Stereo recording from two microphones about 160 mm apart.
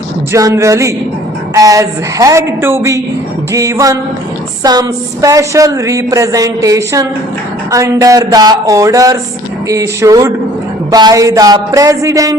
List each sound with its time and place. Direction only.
0.3 s a woman's voice: 20° right (ahead or behind)